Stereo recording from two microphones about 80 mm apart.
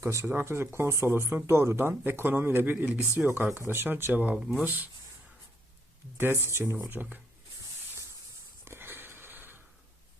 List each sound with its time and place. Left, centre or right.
0.0 s speech: right
4.2 s speech: centre
6.1 s speech: right
6.7 s speech: right
8.6 s a sound: right